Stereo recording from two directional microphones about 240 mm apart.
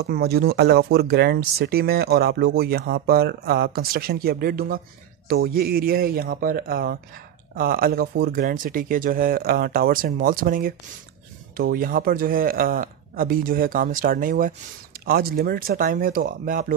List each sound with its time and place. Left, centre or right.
0.0 s speech: right